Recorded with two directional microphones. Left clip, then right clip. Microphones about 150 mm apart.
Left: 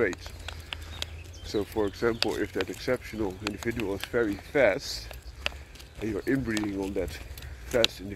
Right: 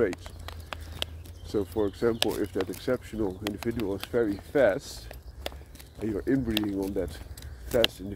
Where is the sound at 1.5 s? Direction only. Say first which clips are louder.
Right 1 dB; 15° right (ahead or behind).